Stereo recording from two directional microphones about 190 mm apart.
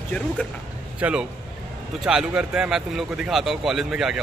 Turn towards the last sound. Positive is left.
turn(degrees=-5)  # may be behind; listen again after turning